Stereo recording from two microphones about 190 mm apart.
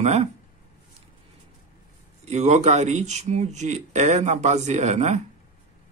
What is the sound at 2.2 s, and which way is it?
A man's voice, 35° right (ahead or behind).